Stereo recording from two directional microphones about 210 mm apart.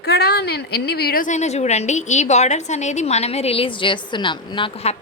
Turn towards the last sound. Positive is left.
turn(degrees=25)  # may be behind; listen again after turning